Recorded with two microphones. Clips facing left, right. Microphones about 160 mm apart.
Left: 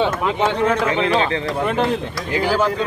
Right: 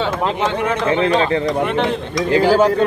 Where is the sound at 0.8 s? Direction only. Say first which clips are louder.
Right 3 dB; 35° right (ahead or behind).